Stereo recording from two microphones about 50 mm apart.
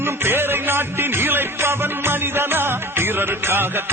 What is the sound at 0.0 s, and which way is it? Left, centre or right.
Music, right.